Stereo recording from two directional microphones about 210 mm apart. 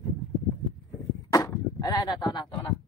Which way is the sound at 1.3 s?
15° left (ahead or behind).